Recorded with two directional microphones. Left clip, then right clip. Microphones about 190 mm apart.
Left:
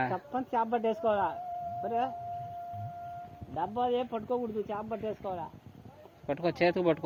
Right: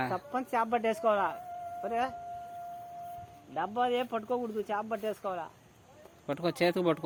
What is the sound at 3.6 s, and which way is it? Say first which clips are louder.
Speech: even; 15° left (ahead or behind).